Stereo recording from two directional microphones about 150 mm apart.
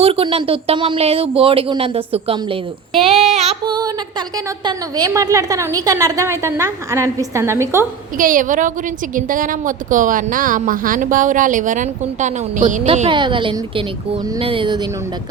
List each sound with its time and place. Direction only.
0.0 s speech: 40° right (ahead or behind)
3.0 s child singing: 45° right (ahead or behind)
3.7 s a sound: 30° right (ahead or behind)
4.6 s a woman's voice: 25° right (ahead or behind)
8.2 s a woman's voice: 65° right (ahead or behind)
12.8 s speech: 40° right (ahead or behind)